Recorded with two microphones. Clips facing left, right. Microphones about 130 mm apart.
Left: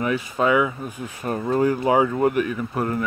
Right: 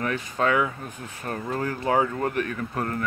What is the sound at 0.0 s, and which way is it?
Speech, 10° left (ahead or behind).